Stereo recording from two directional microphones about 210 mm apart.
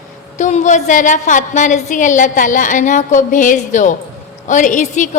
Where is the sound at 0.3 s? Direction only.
35° left (ahead or behind).